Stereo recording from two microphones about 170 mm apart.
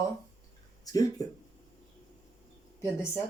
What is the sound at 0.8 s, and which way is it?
Speech, 20° left (ahead or behind).